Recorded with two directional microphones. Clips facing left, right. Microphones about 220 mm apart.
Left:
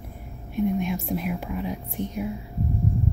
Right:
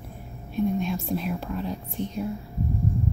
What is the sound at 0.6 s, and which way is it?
Speech, 15° left (ahead or behind).